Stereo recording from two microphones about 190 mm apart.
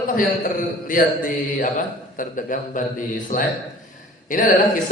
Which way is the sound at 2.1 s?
45° left (ahead or behind).